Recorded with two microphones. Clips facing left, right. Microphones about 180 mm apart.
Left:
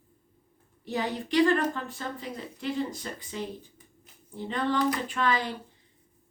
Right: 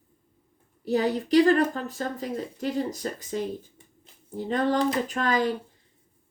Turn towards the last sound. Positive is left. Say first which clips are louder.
# right 3 dB
turn(degrees=-45)  # may be behind; listen again after turning